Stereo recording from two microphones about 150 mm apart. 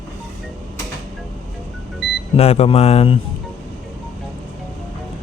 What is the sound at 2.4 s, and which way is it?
Speech, 45° left (ahead or behind).